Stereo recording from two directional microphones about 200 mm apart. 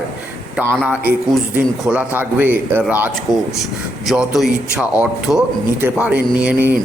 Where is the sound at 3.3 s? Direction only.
20° left (ahead or behind).